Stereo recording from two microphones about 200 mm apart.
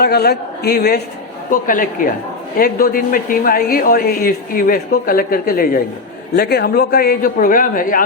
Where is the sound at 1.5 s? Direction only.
45° left (ahead or behind).